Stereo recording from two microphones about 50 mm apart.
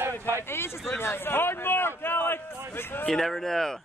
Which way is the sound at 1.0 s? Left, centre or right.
Left.